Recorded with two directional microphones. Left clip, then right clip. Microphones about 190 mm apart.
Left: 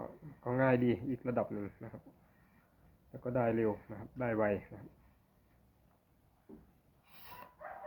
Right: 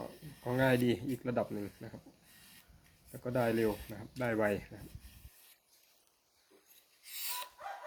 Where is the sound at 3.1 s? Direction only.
40° right (ahead or behind).